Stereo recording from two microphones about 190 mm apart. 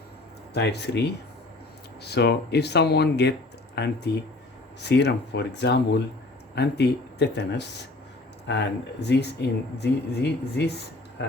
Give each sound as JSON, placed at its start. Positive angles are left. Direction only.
{"t": 0.5, "sound": "speech", "side_deg": 65}
{"t": 2.0, "sound": "speech", "side_deg": 60}